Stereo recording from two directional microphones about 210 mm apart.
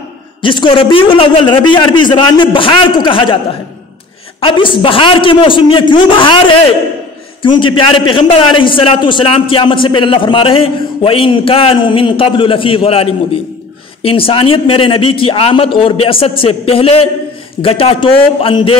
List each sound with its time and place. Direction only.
0.4 s a man's voice: 25° left (ahead or behind)
4.4 s a man's voice: 25° left (ahead or behind)